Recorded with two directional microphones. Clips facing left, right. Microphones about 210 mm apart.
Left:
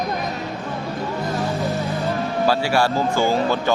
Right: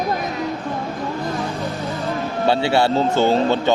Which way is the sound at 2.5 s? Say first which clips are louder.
Right 4 dB; 25° right (ahead or behind).